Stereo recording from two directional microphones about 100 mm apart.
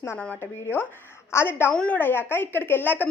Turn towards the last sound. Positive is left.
turn(degrees=20)  # may be behind; listen again after turning